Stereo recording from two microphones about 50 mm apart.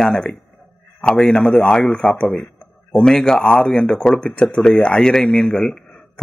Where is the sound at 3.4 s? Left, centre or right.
Left.